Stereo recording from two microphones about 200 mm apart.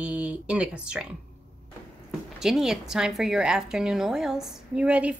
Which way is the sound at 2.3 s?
Centre (ahead or behind).